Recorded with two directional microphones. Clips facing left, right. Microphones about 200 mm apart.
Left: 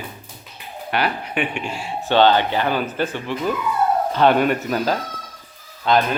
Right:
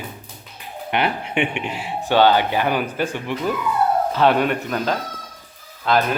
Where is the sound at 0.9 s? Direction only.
25° right (ahead or behind).